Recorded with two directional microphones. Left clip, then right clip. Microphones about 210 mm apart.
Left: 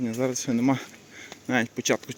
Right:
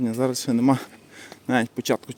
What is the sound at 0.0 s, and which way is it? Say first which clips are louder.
Speech: right 3 dB; 20° right (ahead or behind).